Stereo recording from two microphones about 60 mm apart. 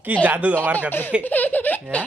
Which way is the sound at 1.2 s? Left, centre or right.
Left.